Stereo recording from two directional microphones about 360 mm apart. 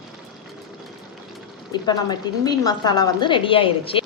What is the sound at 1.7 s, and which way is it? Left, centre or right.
A woman's voice, centre.